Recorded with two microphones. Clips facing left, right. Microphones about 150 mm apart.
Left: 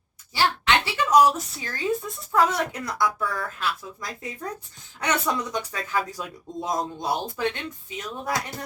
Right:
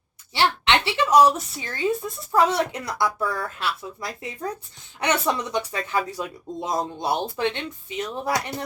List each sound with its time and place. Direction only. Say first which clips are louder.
0.3 s speech: right 1 dB; 25° right (ahead or behind)